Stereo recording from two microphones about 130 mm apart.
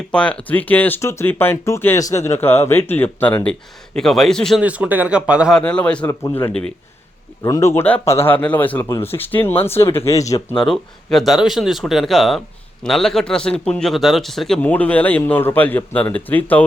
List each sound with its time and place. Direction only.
0.1 s speech: 10° left (ahead or behind)
4.6 s speech: 10° right (ahead or behind)
5.5 s speech: 10° left (ahead or behind)
7.4 s speech: 25° left (ahead or behind)
10.5 s speech: 5° left (ahead or behind)